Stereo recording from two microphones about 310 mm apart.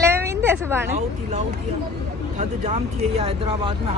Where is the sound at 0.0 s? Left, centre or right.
Centre.